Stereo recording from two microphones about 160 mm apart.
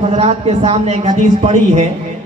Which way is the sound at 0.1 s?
45° right (ahead or behind).